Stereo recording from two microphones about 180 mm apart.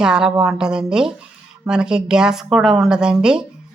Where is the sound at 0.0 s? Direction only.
5° right (ahead or behind).